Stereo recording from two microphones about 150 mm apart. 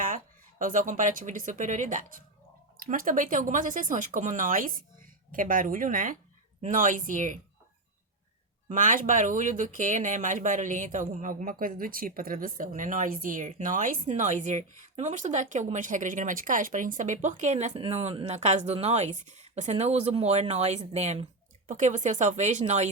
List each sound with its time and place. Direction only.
0.6 s speech: 60° right (ahead or behind)
8.7 s speech: 60° right (ahead or behind)